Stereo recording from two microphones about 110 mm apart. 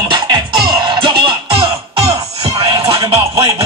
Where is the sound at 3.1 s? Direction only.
25° right (ahead or behind).